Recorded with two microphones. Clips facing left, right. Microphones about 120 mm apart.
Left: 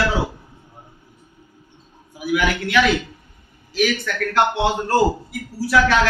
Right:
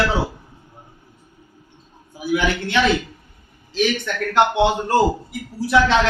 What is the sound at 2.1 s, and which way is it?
A woman's voice, 30° right (ahead or behind).